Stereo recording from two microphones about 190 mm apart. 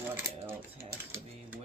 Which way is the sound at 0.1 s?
10° right (ahead or behind).